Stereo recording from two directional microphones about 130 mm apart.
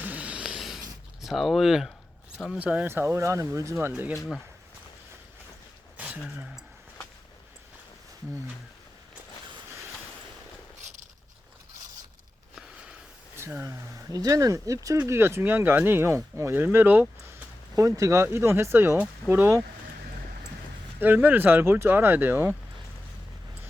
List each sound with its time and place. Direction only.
0.0 s a sound: 10° right (ahead or behind)
1.2 s speech: centre (ahead or behind)
4.1 s speech: centre (ahead or behind)
6.0 s a sound: 10° right (ahead or behind)
13.3 s speech: 20° right (ahead or behind)
17.7 s speech: 25° right (ahead or behind)
21.0 s speech: 15° right (ahead or behind)